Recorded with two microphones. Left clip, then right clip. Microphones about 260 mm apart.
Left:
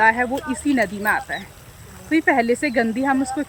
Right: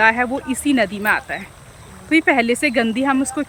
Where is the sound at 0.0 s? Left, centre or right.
Centre.